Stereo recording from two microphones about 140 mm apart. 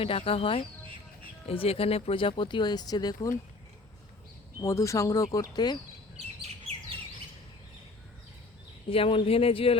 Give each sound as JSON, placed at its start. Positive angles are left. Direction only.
{"t": 0.0, "sound": "speech", "side_deg": 40}
{"t": 4.6, "sound": "speech", "side_deg": 20}
{"t": 8.9, "sound": "speech", "side_deg": 40}